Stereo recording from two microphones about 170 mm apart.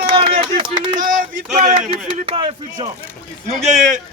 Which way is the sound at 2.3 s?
30° right (ahead or behind).